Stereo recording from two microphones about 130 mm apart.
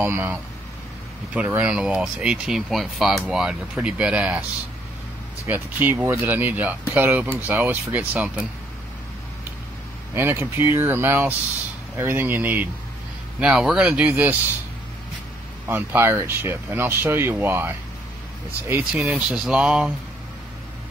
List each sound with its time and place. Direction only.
0.0 s speech: 15° right (ahead or behind)
5.5 s speech: 15° right (ahead or behind)
10.1 s speech: 20° right (ahead or behind)
13.4 s speech: 5° right (ahead or behind)
15.7 s speech: 15° right (ahead or behind)
18.9 s speech: 5° right (ahead or behind)